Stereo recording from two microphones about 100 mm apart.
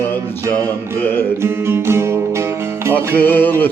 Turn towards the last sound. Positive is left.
turn(degrees=20)  # may be behind; listen again after turning